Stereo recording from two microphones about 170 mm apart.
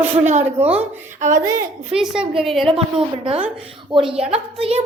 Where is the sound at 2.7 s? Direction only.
35° right (ahead or behind).